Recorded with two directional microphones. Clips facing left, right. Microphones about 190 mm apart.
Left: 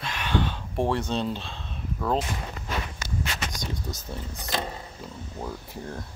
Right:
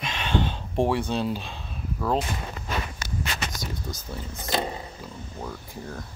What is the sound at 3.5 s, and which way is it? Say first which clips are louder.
Speech: even; centre (ahead or behind).